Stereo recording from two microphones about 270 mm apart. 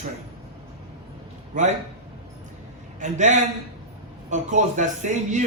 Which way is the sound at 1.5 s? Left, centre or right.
Right.